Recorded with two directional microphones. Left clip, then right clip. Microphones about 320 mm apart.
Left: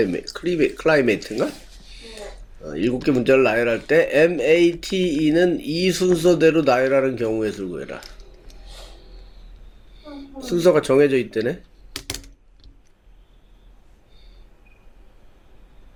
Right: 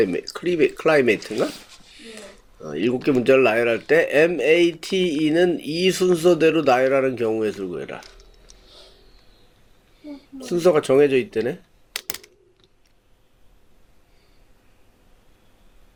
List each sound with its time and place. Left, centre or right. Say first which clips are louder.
0.0 s speech: right 1 dB; right
2.0 s a sound: left 2 dB; right
2.6 s speech: even; right
10.4 s speech: left 1 dB; right